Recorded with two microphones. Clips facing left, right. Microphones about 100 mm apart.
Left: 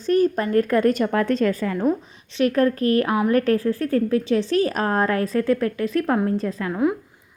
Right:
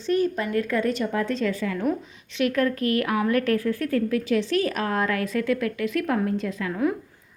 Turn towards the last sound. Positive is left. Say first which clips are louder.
# left 3 dB
turn(degrees=35)  # may be behind; listen again after turning